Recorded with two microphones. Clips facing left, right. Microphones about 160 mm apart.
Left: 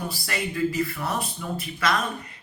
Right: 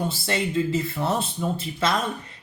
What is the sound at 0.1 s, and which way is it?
Speech, 25° right (ahead or behind).